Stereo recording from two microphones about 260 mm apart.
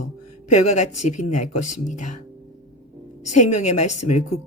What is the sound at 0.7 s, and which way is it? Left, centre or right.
A woman's voice, left.